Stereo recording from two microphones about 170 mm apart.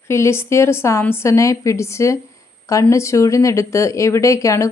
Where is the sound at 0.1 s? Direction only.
15° left (ahead or behind).